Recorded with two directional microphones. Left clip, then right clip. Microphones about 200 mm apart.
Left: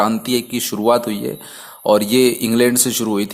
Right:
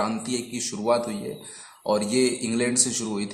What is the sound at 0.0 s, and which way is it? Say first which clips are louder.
Speech: left 10 dB; 40° left (ahead or behind).